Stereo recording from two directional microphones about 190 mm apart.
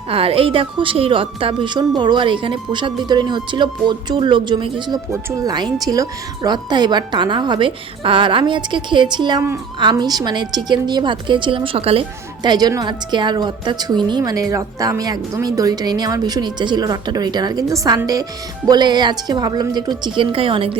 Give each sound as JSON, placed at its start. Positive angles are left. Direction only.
{"t": 0.1, "sound": "a woman's voice", "side_deg": -30}